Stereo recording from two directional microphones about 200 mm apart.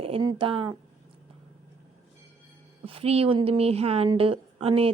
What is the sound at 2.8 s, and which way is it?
A woman's voice, 30° right (ahead or behind).